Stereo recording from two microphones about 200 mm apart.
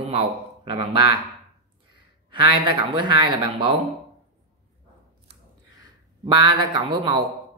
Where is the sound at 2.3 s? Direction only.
25° right (ahead or behind).